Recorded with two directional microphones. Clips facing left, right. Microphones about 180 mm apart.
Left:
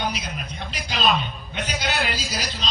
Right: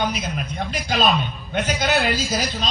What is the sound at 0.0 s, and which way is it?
A man's voice, 45° right (ahead or behind).